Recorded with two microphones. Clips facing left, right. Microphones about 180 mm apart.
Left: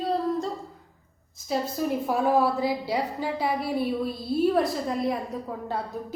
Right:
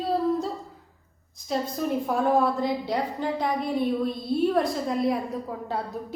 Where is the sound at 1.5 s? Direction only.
5° left (ahead or behind).